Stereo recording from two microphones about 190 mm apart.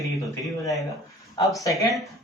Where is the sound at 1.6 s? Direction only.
15° left (ahead or behind).